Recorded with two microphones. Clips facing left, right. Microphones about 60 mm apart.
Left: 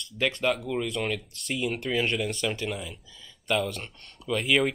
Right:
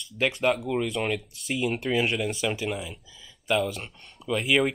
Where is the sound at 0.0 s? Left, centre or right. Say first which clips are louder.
Right 2 dB; centre.